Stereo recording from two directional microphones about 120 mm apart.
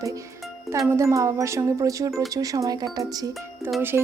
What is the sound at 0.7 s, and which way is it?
Speech, 25° right (ahead or behind).